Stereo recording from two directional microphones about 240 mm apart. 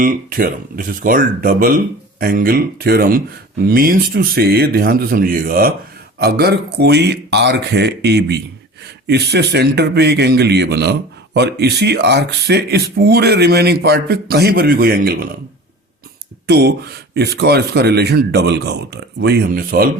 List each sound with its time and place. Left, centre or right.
0.0 s speech: right
16.5 s speech: right